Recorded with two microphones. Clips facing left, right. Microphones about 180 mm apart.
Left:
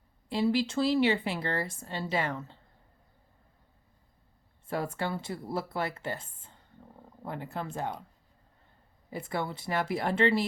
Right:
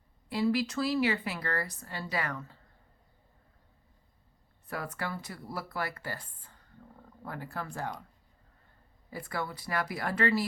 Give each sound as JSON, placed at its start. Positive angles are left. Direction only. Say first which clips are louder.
{"t": 0.3, "sound": "speech", "louder": "left 1 dB", "side_deg": 25}
{"t": 4.6, "sound": "speech", "louder": "left 5 dB", "side_deg": 25}
{"t": 9.0, "sound": "speech", "louder": "left 3 dB", "side_deg": 25}